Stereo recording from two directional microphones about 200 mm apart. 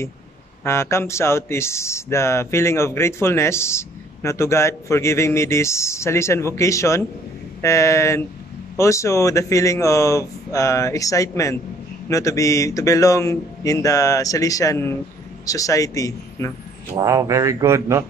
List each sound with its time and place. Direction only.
0.7 s speech: 15° left (ahead or behind)
16.9 s speech: 15° right (ahead or behind)